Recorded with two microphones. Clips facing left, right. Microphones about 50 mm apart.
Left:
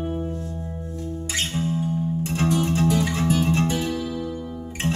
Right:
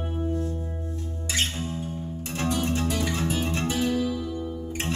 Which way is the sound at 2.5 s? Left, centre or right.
Left.